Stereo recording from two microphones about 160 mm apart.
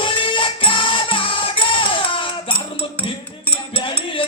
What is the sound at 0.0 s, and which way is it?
Music, 30° left (ahead or behind).